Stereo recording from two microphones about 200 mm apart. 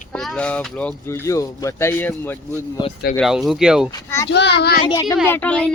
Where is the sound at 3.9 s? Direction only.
15° left (ahead or behind).